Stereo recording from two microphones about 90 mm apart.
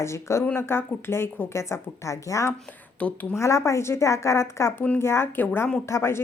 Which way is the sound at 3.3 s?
35° left (ahead or behind).